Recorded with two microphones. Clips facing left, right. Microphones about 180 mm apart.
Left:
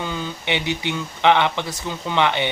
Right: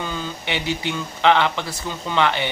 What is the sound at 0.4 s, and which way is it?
Speech, 20° left (ahead or behind).